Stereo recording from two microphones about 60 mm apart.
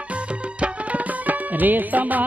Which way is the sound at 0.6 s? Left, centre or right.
Right.